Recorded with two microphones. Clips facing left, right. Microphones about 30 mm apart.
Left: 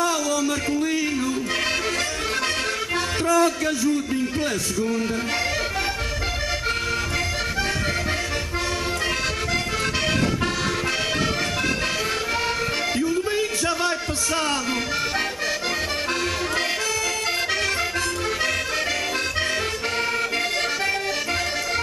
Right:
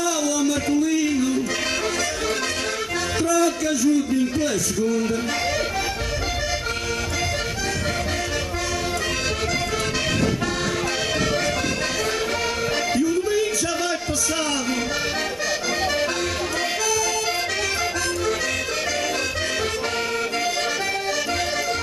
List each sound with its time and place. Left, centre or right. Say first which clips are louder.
0.0 s music: even; left
3.2 s a sound: even; left
4.4 s speech: right 2 dB; left